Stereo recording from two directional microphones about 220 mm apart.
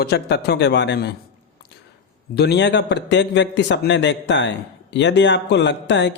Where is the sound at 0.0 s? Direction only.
50° left (ahead or behind).